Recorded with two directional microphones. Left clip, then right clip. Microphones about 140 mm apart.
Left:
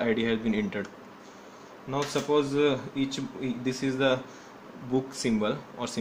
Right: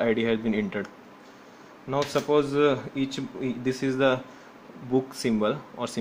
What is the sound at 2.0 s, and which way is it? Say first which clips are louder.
Speech: right 3 dB; 60° right (ahead or behind).